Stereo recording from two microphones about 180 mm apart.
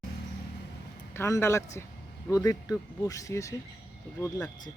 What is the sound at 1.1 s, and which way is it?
Speech, 15° left (ahead or behind).